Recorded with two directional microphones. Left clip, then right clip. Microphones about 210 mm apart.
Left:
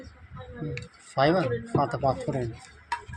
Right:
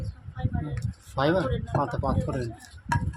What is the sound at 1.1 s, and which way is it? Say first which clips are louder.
Speech: left 2 dB; 10° right (ahead or behind).